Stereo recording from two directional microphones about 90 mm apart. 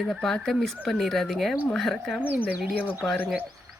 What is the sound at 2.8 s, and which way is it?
Speech, 25° left (ahead or behind).